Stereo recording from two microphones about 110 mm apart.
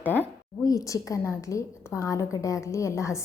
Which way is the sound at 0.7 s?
30° left (ahead or behind).